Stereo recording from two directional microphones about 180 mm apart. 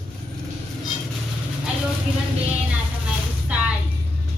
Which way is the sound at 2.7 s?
5° right (ahead or behind).